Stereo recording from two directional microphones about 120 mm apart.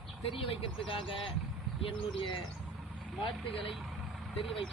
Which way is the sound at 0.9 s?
45° left (ahead or behind).